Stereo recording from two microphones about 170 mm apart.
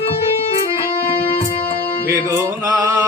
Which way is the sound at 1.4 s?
45° left (ahead or behind).